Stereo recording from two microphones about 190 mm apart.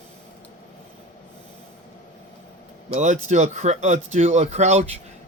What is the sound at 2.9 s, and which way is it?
Speech, 40° right (ahead or behind).